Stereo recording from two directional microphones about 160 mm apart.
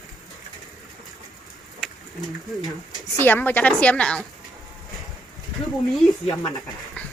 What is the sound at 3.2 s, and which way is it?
A woman's voice, 10° left (ahead or behind).